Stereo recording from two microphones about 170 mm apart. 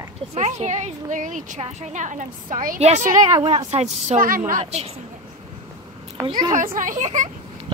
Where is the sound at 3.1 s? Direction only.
25° right (ahead or behind); by 4.8 s 40° right (ahead or behind).